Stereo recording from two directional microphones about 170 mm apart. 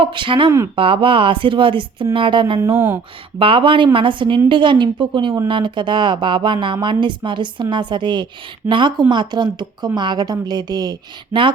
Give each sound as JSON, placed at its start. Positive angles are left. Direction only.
{"t": 0.0, "sound": "speech", "side_deg": -30}
{"t": 2.7, "sound": "speech", "side_deg": -15}
{"t": 3.3, "sound": "speech", "side_deg": -30}